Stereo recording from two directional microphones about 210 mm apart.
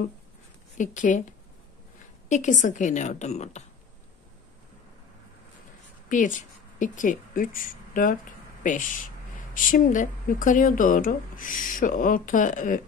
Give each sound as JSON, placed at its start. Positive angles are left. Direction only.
{"t": 0.7, "sound": "speech", "side_deg": 35}
{"t": 2.2, "sound": "speech", "side_deg": 35}
{"t": 6.0, "sound": "speech", "side_deg": 40}